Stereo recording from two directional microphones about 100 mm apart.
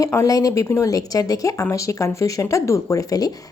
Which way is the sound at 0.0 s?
30° left (ahead or behind).